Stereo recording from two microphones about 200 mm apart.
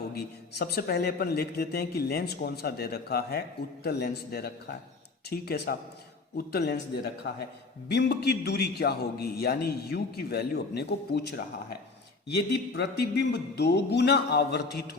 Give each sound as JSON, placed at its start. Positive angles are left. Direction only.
{"t": 0.1, "sound": "a man's voice", "side_deg": 50}
{"t": 7.9, "sound": "a man's voice", "side_deg": 55}
{"t": 12.5, "sound": "speech", "side_deg": 60}